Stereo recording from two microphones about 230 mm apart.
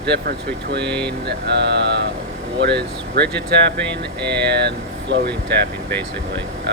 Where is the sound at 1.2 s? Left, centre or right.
Right.